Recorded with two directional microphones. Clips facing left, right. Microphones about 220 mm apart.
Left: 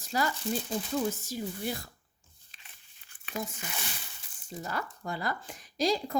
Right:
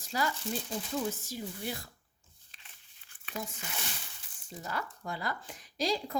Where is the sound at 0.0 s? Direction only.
45° left (ahead or behind).